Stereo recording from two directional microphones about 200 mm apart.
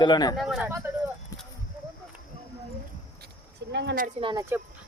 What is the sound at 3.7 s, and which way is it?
Speech, 60° right (ahead or behind).